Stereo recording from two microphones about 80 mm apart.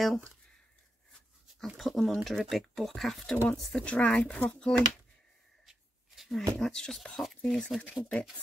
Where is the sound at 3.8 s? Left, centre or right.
Centre.